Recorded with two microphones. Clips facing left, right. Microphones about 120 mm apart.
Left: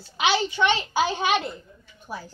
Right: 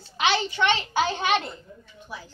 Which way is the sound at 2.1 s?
45° left (ahead or behind).